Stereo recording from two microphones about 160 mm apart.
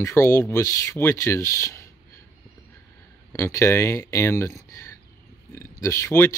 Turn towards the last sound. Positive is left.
turn(degrees=15)  # may be behind; listen again after turning